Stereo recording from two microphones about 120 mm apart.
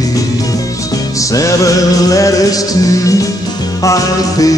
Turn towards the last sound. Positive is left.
turn(degrees=30)  # may be behind; listen again after turning